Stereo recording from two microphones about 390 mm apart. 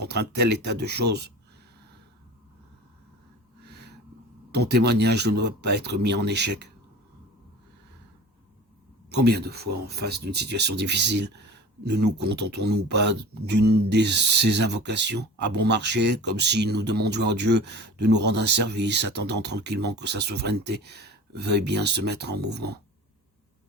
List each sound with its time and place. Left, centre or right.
0.0 s speech: right
3.6 s a sound: right
4.5 s speech: right
9.0 s speech: right